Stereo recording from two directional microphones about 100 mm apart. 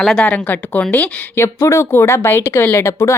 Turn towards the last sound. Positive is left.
turn(degrees=25)  # may be behind; listen again after turning